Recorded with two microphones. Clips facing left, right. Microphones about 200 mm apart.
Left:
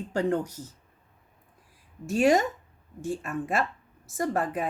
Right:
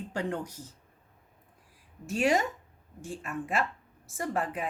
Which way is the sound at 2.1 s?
40° left (ahead or behind).